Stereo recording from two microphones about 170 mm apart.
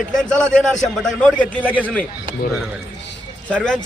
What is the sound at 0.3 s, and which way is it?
A man's voice, 5° left (ahead or behind).